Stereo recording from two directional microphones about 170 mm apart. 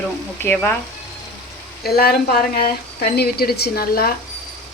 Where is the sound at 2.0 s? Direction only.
65° left (ahead or behind).